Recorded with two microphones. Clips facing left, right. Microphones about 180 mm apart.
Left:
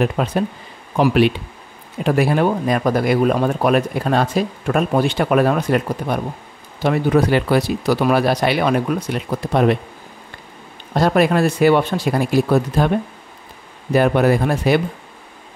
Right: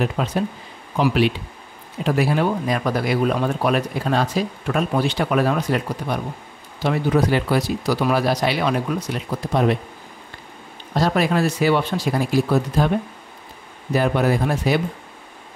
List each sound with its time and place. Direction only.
0.0 s speech: 55° left (ahead or behind)
11.0 s speech: 55° left (ahead or behind)
13.9 s speech: 60° left (ahead or behind)